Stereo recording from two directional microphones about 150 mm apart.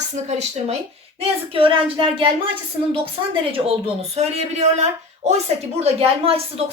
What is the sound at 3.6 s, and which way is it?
A woman's voice, 40° right (ahead or behind).